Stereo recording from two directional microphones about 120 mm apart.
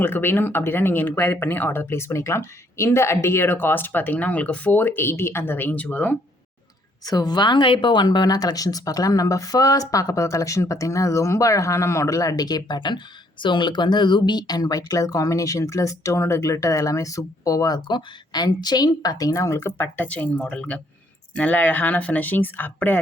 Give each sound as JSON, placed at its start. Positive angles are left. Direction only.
{"t": 0.0, "sound": "speech", "side_deg": 15}
{"t": 7.0, "sound": "speech", "side_deg": 35}